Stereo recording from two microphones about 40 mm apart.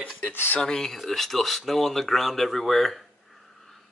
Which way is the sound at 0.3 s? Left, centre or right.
Left.